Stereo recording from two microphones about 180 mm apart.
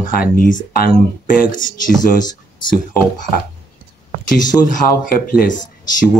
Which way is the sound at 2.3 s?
25° left (ahead or behind).